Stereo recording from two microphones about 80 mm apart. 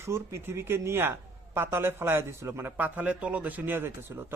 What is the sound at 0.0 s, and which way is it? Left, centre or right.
A man's voice, right.